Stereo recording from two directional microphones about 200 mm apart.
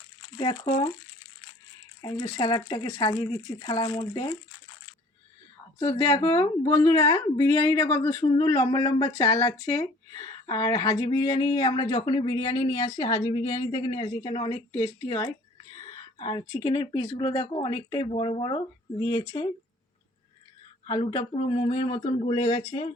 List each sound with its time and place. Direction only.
0.3 s speech: 25° left (ahead or behind)
2.0 s speech: 25° left (ahead or behind)
6.0 s speech: 15° left (ahead or behind)
20.8 s speech: 25° left (ahead or behind)